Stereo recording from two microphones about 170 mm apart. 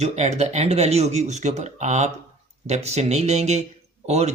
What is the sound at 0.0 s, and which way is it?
Speech, 40° right (ahead or behind).